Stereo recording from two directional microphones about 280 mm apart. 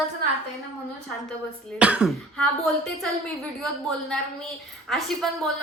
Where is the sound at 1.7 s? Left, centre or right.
Centre.